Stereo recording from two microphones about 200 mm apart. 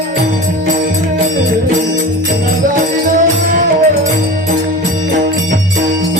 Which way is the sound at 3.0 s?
40° right (ahead or behind).